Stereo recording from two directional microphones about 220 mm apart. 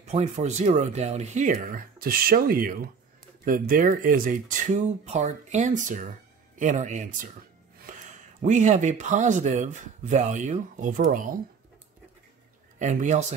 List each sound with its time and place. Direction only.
0.0 s speech: 30° right (ahead or behind)
12.7 s speech: 35° right (ahead or behind)